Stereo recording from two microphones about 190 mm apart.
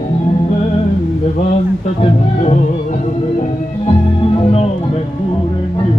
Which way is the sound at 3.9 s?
30° left (ahead or behind).